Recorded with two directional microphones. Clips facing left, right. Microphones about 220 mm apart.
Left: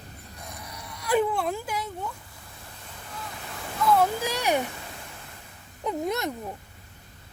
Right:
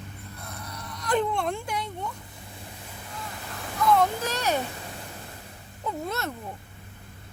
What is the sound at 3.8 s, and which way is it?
Speech, 5° left (ahead or behind).